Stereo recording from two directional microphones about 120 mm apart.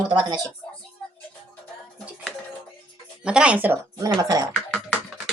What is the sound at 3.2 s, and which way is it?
Speech, 10° right (ahead or behind).